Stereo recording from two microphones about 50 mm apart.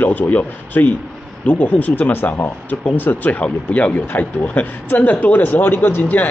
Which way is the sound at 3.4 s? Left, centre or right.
Left.